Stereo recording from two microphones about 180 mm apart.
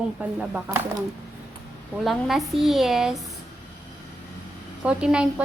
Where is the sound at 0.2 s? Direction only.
10° right (ahead or behind).